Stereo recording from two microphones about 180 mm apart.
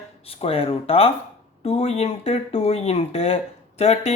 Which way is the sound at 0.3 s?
30° left (ahead or behind).